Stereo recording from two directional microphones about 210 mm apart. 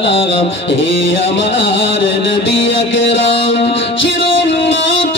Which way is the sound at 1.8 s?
60° left (ahead or behind).